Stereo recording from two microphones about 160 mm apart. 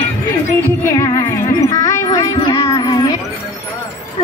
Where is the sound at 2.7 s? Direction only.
25° left (ahead or behind).